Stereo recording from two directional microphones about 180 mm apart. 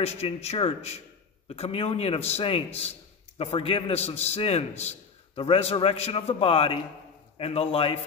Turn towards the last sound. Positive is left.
turn(degrees=30)  # may be behind; listen again after turning